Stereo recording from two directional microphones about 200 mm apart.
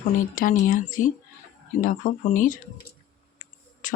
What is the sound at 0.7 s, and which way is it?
Speech, 40° left (ahead or behind).